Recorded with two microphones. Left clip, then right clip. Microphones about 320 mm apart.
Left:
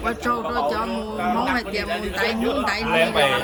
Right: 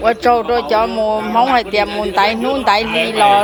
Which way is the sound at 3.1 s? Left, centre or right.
Centre.